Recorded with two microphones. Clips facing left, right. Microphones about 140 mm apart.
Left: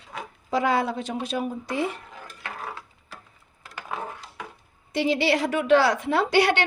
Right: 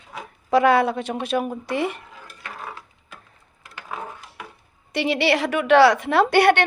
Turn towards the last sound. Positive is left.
turn(degrees=-60)  # may be behind; listen again after turning